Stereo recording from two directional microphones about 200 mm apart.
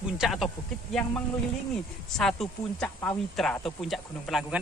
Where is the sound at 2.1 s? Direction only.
Centre (ahead or behind).